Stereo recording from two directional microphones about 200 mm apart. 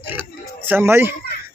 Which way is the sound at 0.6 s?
10° right (ahead or behind).